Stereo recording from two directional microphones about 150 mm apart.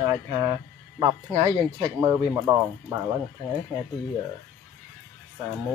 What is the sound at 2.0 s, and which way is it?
Speech, 20° right (ahead or behind).